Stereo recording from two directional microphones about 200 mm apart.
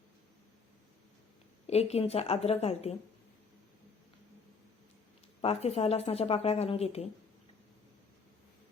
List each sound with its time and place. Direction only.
1.6 s speech: 30° left (ahead or behind)
5.4 s speech: 30° left (ahead or behind)